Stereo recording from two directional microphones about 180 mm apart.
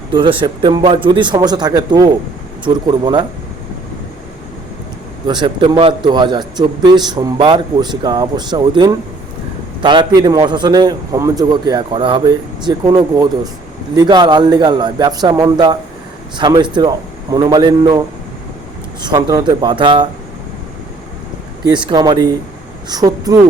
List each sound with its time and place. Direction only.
0.1 s a man's voice: 30° right (ahead or behind)
5.2 s a man's voice: 25° right (ahead or behind)
19.0 s a man's voice: 20° right (ahead or behind)
21.7 s a man's voice: 25° right (ahead or behind)